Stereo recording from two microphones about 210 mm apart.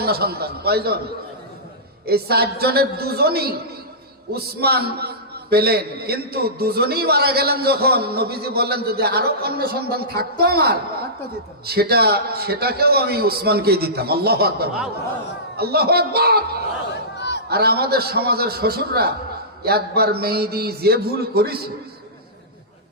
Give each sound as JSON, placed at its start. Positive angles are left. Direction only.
{"t": 0.0, "sound": "a man's voice", "side_deg": -50}
{"t": 2.0, "sound": "a man's voice", "side_deg": -50}
{"t": 17.2, "sound": "a sound", "side_deg": 55}
{"t": 17.5, "sound": "a man's voice", "side_deg": -50}